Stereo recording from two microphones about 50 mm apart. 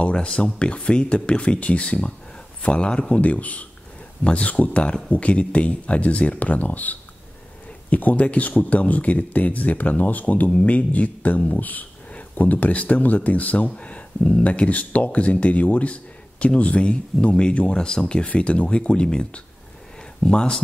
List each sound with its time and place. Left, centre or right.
0.0 s speech: left